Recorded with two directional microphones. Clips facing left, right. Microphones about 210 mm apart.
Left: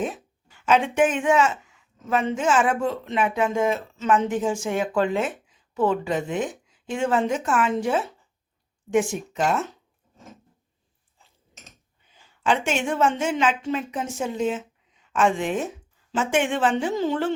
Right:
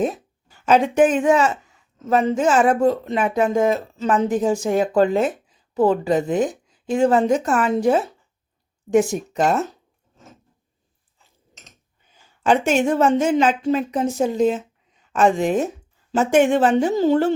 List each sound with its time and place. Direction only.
0.0 s a woman's voice: 40° right (ahead or behind)
12.4 s a woman's voice: 40° right (ahead or behind)